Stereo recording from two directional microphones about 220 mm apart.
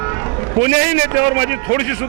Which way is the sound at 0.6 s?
15° right (ahead or behind).